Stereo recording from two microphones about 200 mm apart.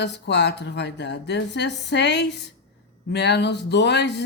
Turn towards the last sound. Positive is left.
turn(degrees=60)  # may be behind; listen again after turning